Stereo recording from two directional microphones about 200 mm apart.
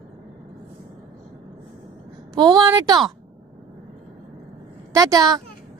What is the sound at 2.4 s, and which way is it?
Speech, 20° right (ahead or behind).